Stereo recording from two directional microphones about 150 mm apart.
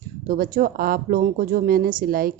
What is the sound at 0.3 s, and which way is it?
Speech, 70° right (ahead or behind).